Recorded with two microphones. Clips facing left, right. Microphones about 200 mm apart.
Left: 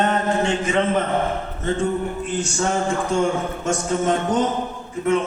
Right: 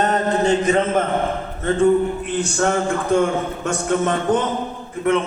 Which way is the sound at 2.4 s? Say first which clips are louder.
Right 3 dB; 60° right (ahead or behind).